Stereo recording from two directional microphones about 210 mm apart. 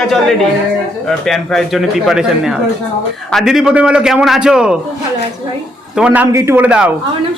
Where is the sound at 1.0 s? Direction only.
Centre (ahead or behind).